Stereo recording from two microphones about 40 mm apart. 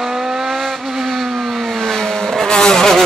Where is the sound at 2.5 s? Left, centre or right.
Centre.